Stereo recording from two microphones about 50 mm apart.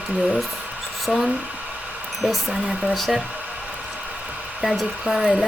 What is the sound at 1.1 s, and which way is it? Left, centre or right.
Speech, centre.